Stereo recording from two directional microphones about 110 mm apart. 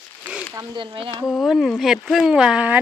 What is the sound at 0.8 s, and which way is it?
Speech, 50° right (ahead or behind).